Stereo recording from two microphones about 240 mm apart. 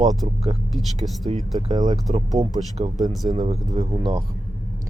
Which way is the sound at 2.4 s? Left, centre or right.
Right.